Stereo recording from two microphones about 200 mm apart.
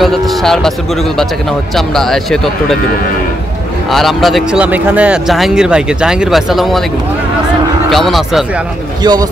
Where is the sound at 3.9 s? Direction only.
Centre (ahead or behind).